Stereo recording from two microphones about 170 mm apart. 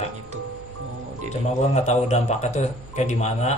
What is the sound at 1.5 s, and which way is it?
Speech, 40° left (ahead or behind).